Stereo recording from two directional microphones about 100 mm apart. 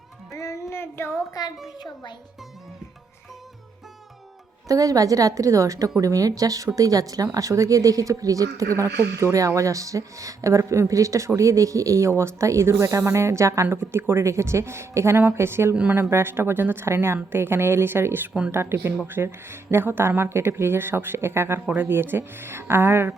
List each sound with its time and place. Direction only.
0.3 s child singing: 30° left (ahead or behind)
1.3 s a child's voice: 40° left (ahead or behind)
4.7 s speech: 35° right (ahead or behind)
15.7 s speech: 10° right (ahead or behind)
16.0 s speech: 25° right (ahead or behind)